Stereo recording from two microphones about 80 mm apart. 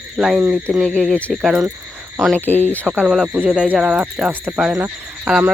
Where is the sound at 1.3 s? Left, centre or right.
Centre.